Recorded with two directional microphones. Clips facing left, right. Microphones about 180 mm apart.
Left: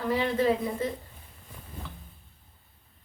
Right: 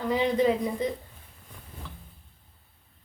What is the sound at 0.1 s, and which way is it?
Speech, 15° right (ahead or behind).